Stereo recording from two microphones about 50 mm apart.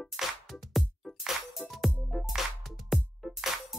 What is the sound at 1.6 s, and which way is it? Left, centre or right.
Music, left.